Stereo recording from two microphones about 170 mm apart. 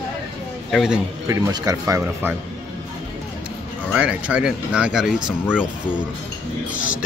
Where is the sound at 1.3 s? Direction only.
20° right (ahead or behind).